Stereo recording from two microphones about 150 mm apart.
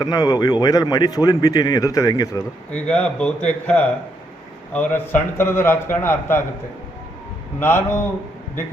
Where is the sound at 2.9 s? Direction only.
5° left (ahead or behind).